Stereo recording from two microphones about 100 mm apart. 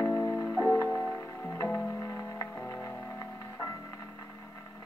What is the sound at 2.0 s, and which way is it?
Music, 20° left (ahead or behind).